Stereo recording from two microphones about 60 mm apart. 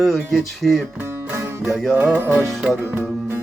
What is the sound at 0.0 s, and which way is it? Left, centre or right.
Music, centre.